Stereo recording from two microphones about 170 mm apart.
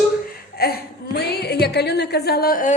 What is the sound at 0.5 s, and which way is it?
A woman's voice, 65° left (ahead or behind).